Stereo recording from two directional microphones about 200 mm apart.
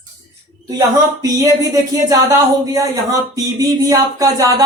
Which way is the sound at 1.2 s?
15° right (ahead or behind).